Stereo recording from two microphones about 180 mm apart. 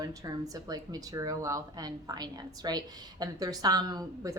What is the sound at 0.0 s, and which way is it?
Speech, 20° right (ahead or behind).